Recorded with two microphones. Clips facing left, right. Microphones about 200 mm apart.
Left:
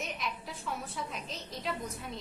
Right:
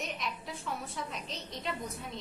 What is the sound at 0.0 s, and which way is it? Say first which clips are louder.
A woman's voice: even; centre (ahead or behind).